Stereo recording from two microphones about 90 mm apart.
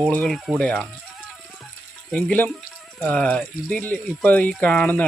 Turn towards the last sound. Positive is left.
turn(degrees=15)  # may be behind; listen again after turning